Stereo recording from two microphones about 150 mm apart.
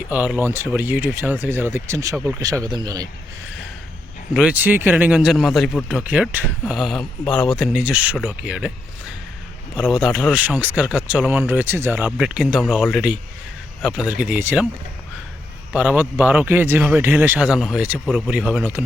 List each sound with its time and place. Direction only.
0.1 s speech: 10° right (ahead or behind)
4.4 s speech: 10° right (ahead or behind)
9.7 s speech: 5° right (ahead or behind)
15.7 s speech: 10° right (ahead or behind)